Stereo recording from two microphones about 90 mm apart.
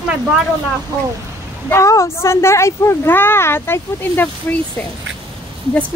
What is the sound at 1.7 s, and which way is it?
Speech, 35° left (ahead or behind).